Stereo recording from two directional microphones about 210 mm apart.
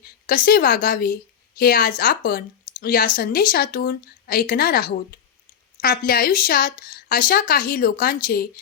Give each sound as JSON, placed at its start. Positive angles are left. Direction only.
{"t": 0.0, "sound": "speech", "side_deg": 45}